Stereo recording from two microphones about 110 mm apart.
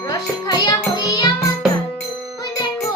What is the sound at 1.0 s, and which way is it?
Music, 35° left (ahead or behind).